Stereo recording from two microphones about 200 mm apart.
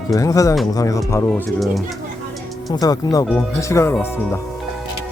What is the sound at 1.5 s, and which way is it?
Speech, centre (ahead or behind).